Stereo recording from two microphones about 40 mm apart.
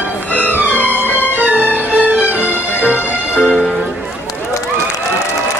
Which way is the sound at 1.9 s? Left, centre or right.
Right.